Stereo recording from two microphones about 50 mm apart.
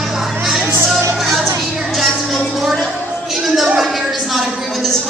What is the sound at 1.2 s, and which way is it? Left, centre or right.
Music, centre.